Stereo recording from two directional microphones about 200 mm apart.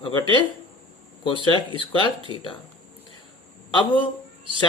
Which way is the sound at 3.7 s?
25° left (ahead or behind).